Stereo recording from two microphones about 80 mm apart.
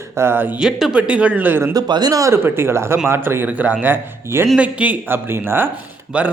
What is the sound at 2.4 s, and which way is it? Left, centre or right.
A man's voice, right.